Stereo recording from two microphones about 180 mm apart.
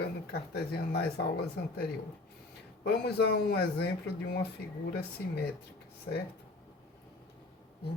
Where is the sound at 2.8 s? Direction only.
65° left (ahead or behind).